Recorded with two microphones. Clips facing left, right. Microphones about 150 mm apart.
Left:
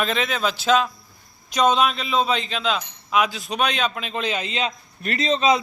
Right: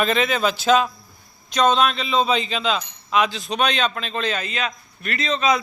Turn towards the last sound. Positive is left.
turn(degrees=30)  # may be behind; listen again after turning